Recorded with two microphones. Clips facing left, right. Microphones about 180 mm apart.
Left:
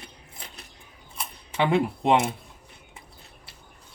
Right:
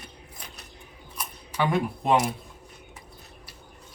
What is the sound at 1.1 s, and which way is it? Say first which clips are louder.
Camera: left 1 dB; 25° left (ahead or behind).